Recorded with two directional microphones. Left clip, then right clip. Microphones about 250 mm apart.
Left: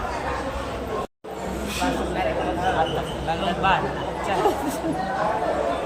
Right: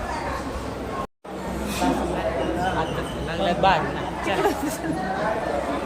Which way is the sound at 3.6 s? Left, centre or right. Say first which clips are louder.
Right 2 dB; centre.